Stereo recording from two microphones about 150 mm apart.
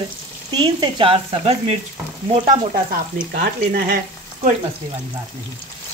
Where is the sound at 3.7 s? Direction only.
90° right.